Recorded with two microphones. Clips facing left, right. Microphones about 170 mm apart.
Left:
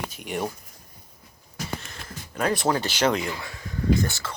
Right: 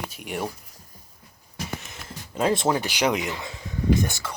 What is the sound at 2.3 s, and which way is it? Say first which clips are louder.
Speech: right 2 dB; 25° right (ahead or behind).